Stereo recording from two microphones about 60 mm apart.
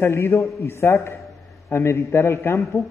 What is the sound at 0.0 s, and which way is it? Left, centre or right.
A man's voice, left.